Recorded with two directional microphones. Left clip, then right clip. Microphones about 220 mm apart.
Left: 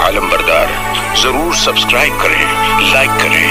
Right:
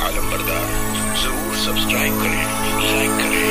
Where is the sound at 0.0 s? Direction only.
40° left (ahead or behind).